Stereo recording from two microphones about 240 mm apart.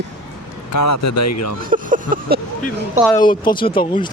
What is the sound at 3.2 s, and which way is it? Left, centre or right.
Speech, centre.